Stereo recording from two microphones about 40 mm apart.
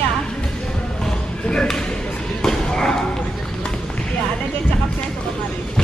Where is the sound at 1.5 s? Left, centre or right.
Left.